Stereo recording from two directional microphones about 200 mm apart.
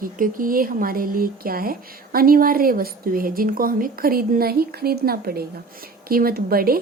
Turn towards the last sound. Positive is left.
turn(degrees=-50)  # may be behind; listen again after turning